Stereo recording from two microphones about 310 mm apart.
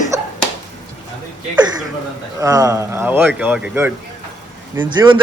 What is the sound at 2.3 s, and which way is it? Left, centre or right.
A man's voice, centre.